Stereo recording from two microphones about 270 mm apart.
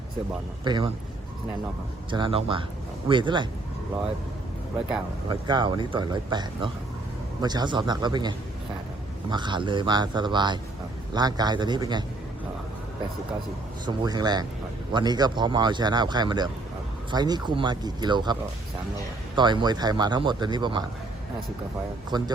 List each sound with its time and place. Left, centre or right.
0.6 s speech: centre
2.0 s speech: centre
5.3 s speech: centre
13.8 s speech: centre
19.4 s speech: centre
22.1 s speech: centre